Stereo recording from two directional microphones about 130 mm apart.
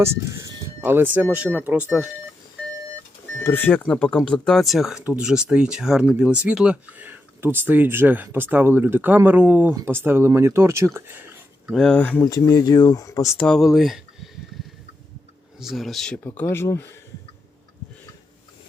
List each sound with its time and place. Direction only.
0.0 s speech: 20° right (ahead or behind)
3.3 s speech: 15° left (ahead or behind); by 11.3 s 15° right (ahead or behind)
11.7 s speech: 5° left (ahead or behind)
12.2 s speech: 30° left (ahead or behind)
13.3 s speech: 10° left (ahead or behind)
13.6 s speech: centre (ahead or behind)
15.5 s speech: centre (ahead or behind)
16.2 s speech: 15° left (ahead or behind)